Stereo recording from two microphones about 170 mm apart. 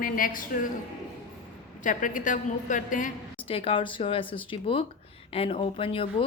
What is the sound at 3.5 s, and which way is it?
Speech, 35° left (ahead or behind).